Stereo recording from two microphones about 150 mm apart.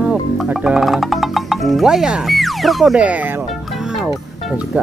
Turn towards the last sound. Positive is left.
turn(degrees=0)  # may be behind; listen again after turning